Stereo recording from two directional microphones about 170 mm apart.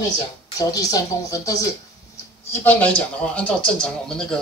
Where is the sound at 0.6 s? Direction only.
20° left (ahead or behind).